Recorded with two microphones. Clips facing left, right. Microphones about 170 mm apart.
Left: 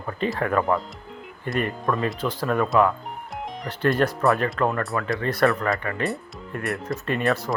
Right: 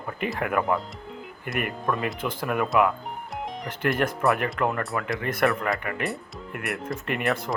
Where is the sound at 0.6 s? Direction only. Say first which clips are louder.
Left 2 dB; centre (ahead or behind).